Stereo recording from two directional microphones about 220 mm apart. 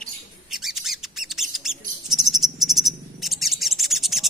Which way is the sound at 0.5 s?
Centre (ahead or behind).